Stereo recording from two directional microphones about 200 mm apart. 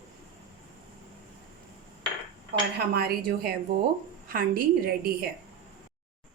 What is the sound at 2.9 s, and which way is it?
A woman's voice, 50° right (ahead or behind).